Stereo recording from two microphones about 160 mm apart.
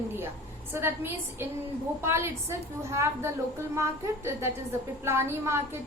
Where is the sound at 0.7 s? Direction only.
15° right (ahead or behind).